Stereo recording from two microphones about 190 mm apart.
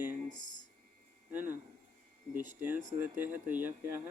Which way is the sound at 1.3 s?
10° right (ahead or behind).